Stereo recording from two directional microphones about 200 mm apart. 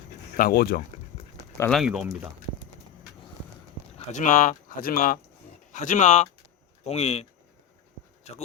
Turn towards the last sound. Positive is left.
turn(degrees=30)  # may be behind; listen again after turning